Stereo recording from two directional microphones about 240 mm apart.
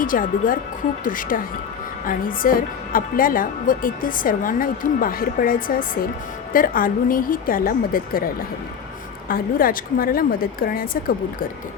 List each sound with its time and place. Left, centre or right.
0.0 s a woman's voice: left
9.3 s a woman's voice: left